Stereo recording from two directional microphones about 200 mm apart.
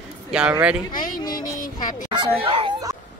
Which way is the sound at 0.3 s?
5° right (ahead or behind).